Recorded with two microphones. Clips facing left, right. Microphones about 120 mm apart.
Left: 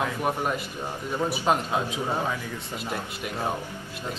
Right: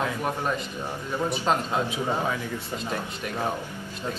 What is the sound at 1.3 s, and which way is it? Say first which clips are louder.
Speech: left 1 dB; 15° left (ahead or behind).